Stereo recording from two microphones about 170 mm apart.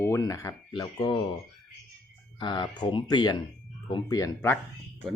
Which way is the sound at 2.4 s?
25° left (ahead or behind).